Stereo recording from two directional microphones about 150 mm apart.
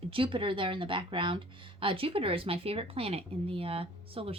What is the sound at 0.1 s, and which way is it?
Speech, 35° right (ahead or behind).